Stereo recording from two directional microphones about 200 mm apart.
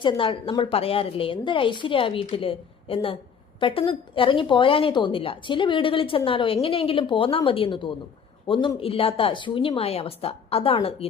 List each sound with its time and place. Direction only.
0.0 s speech: 25° left (ahead or behind)